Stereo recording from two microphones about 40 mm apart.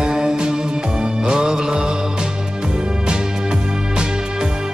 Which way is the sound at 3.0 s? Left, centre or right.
Right.